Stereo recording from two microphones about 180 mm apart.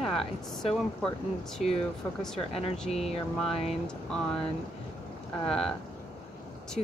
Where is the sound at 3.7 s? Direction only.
5° left (ahead or behind).